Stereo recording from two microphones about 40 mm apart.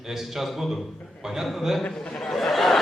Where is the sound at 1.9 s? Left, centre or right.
Centre.